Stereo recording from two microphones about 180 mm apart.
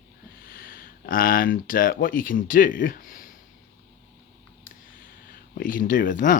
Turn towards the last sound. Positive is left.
turn(degrees=45)  # may be behind; listen again after turning